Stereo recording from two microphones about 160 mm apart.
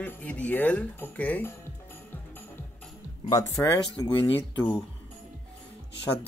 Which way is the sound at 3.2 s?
20° left (ahead or behind).